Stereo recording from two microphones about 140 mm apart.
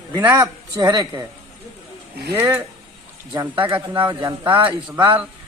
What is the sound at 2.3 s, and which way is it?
Speech, 15° right (ahead or behind).